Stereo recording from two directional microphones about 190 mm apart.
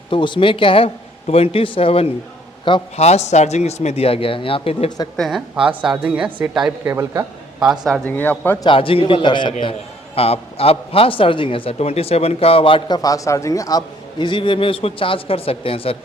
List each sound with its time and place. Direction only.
0.1 s speech: 25° left (ahead or behind)
5.1 s speech: centre (ahead or behind); by 7.7 s 15° right (ahead or behind)
7.7 s speech: centre (ahead or behind)
8.6 s speech: 30° left (ahead or behind)